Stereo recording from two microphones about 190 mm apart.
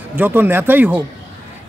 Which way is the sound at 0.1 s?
10° right (ahead or behind).